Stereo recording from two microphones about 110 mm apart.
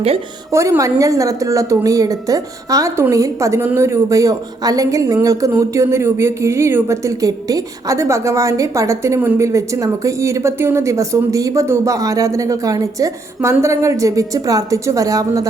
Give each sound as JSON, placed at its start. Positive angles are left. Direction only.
{"t": 0.5, "sound": "speech", "side_deg": -25}